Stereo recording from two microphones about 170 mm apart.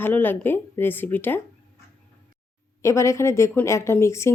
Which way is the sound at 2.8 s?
15° left (ahead or behind).